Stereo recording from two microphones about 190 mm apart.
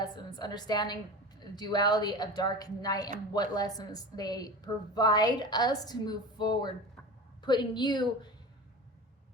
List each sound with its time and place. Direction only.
0.0 s a woman's voice: 20° left (ahead or behind)